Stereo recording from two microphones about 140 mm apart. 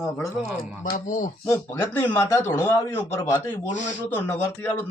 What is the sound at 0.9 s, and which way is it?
Speech, 70° left (ahead or behind).